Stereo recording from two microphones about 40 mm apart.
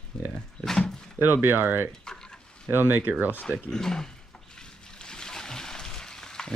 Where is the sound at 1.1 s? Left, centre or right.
Right.